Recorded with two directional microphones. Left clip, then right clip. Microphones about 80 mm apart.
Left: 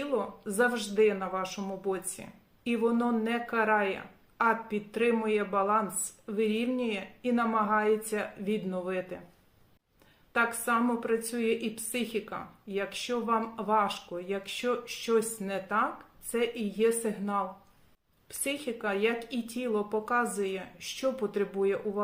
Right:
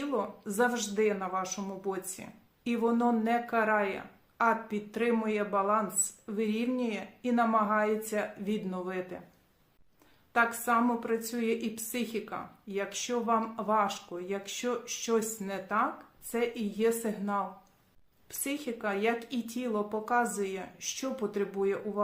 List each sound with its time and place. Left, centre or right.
0.0 s a woman's voice: right
10.3 s a woman's voice: right